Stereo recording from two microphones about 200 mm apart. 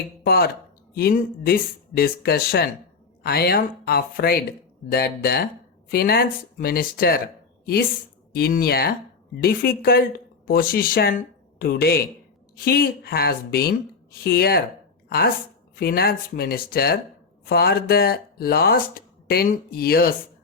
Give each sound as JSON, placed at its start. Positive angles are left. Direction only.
{"t": 0.3, "sound": "a woman's voice", "side_deg": 50}
{"t": 15.7, "sound": "speech", "side_deg": 50}